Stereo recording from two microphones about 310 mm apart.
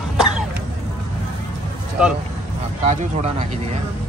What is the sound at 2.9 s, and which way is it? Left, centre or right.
Speech, right.